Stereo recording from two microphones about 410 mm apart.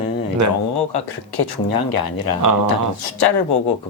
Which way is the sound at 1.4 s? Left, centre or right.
Left.